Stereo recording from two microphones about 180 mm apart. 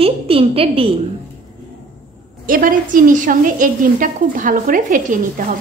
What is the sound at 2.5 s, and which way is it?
A woman's voice, 50° right (ahead or behind).